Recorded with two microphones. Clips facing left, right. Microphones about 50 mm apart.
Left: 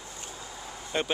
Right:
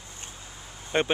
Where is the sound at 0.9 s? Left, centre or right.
Right.